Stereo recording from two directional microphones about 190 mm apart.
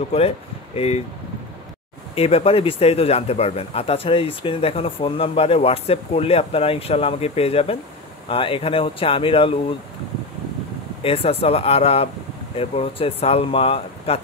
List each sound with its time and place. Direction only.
0.1 s speech: 35° left (ahead or behind)
2.1 s speech: 30° left (ahead or behind)
11.0 s speech: 30° left (ahead or behind)